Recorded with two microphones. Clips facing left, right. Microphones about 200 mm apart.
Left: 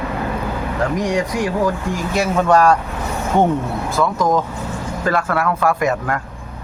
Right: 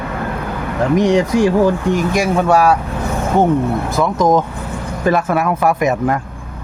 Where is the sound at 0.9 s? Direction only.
25° right (ahead or behind); by 2.8 s 10° right (ahead or behind).